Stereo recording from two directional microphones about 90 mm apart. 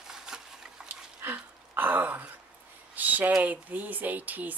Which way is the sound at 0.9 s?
20° right (ahead or behind).